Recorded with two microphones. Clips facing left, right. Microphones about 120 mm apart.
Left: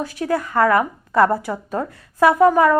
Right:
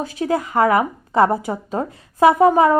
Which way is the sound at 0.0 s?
20° right (ahead or behind).